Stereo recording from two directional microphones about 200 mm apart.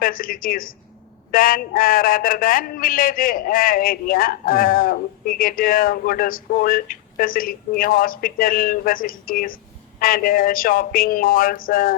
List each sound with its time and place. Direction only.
0.0 s a man's voice: 45° left (ahead or behind)